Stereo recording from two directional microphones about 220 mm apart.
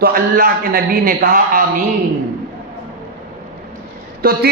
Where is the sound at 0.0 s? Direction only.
40° right (ahead or behind).